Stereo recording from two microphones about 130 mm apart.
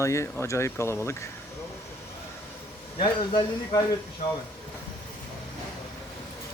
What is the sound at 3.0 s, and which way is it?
Speech, 35° left (ahead or behind).